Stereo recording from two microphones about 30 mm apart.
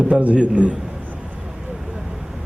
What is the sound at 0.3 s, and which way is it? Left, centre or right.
Speech, right.